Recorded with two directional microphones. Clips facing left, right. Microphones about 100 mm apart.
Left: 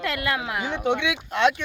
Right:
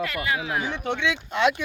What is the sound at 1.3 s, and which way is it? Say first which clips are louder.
Speech: left 2 dB; centre (ahead or behind).